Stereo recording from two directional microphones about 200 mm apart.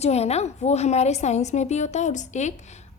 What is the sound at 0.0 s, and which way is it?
A woman's voice, 30° left (ahead or behind).